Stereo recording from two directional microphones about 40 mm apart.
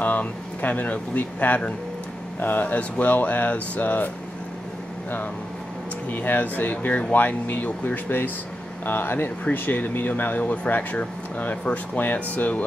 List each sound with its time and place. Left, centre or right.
0.0 s speech: left
6.0 s speech: left
8.8 s speech: left
9.4 s speech: left